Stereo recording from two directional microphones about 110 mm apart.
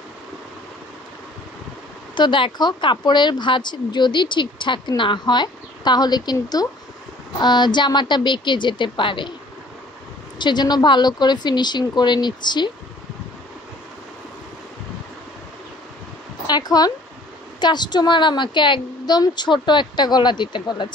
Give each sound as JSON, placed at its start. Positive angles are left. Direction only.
{"t": 2.1, "sound": "a woman's voice", "side_deg": 45}
{"t": 10.4, "sound": "speech", "side_deg": 40}
{"t": 16.4, "sound": "a woman's voice", "side_deg": 40}